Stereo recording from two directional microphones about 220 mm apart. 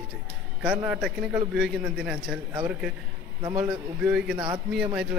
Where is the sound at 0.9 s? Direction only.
Centre (ahead or behind).